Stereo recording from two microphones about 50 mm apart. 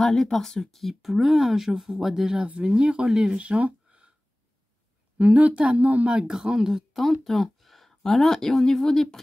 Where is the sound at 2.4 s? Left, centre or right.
Right.